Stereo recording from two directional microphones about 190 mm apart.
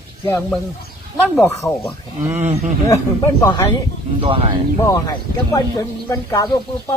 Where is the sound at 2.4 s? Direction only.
35° right (ahead or behind).